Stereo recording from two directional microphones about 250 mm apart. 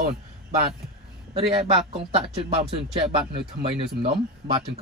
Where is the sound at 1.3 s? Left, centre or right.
Right.